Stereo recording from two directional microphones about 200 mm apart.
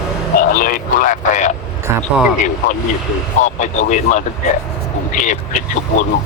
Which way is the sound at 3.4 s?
35° left (ahead or behind).